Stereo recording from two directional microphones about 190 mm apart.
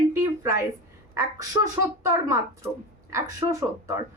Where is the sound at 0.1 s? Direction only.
15° right (ahead or behind).